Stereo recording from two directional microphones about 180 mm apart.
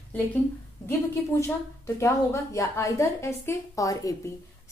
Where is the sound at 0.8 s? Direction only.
15° left (ahead or behind).